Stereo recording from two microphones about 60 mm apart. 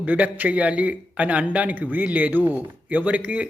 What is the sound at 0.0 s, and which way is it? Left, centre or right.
Speech, right.